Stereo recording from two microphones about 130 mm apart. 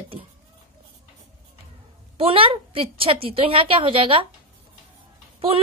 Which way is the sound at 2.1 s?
45° right (ahead or behind).